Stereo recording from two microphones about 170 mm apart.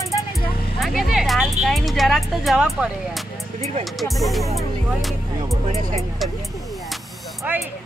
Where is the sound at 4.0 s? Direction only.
Centre (ahead or behind).